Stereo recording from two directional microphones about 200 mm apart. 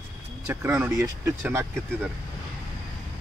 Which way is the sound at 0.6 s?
5° right (ahead or behind).